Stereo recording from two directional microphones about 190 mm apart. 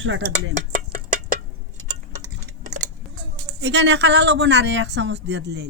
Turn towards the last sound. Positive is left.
turn(degrees=-60)  # may be behind; listen again after turning